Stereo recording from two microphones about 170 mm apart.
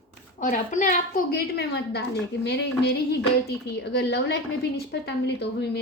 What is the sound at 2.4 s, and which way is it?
A woman's voice, 80° left.